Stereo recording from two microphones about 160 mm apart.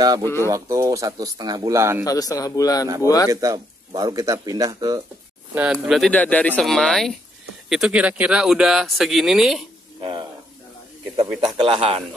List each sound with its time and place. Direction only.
0.2 s speech: 15° left (ahead or behind)
0.5 s speech: 20° right (ahead or behind)
2.0 s a man's voice: 20° left (ahead or behind)
3.3 s speech: 20° right (ahead or behind)
5.5 s speech: 5° right (ahead or behind)
9.9 s speech: 30° right (ahead or behind)
11.4 s speech: 35° right (ahead or behind)